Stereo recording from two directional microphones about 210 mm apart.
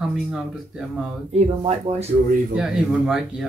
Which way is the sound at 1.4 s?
30° right (ahead or behind).